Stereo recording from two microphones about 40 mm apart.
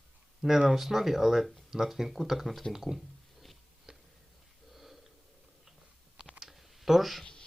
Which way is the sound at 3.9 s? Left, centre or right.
Centre.